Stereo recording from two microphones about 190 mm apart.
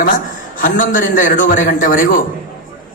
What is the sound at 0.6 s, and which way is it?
A man's voice, 45° left (ahead or behind).